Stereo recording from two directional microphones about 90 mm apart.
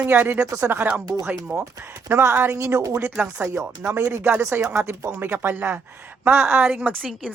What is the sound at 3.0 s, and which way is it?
Speech, 15° right (ahead or behind).